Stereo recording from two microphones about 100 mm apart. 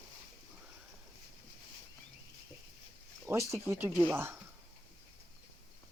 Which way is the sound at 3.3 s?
25° right (ahead or behind).